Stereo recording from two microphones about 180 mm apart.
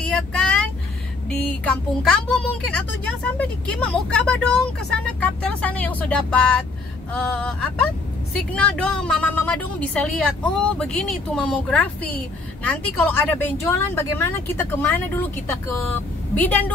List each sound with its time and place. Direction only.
1.6 s a woman's voice: 5° left (ahead or behind)